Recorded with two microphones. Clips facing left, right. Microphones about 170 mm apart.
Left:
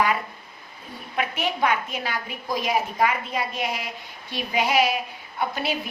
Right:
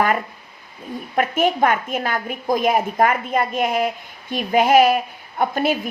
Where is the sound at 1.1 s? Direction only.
50° right (ahead or behind).